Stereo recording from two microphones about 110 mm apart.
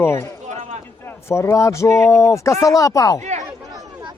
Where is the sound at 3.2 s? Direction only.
90° right.